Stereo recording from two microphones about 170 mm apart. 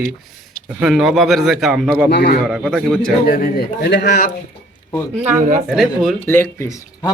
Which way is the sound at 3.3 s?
55° left (ahead or behind).